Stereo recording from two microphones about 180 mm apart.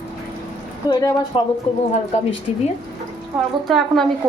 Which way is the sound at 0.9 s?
20° left (ahead or behind).